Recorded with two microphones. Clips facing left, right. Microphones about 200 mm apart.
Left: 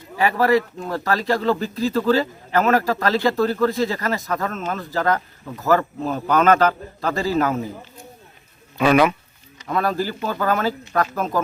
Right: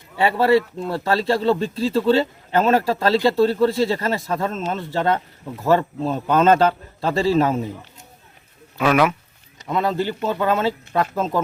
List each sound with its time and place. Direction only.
0.2 s a man's voice: 30° right (ahead or behind)
8.8 s speech: 5° right (ahead or behind)
9.6 s a man's voice: 20° right (ahead or behind)